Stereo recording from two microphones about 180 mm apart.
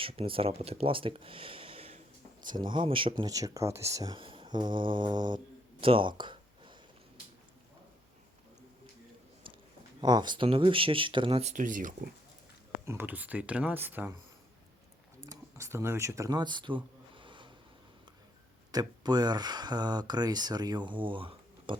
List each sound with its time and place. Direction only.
0.0 s speech: 30° right (ahead or behind)
5.8 s a sound: 30° right (ahead or behind)
10.0 s speech: 25° right (ahead or behind); by 11.9 s 45° right (ahead or behind)
12.8 s speech: 15° right (ahead or behind)
15.2 s a sound: 15° right (ahead or behind)
18.7 s speech: 20° right (ahead or behind)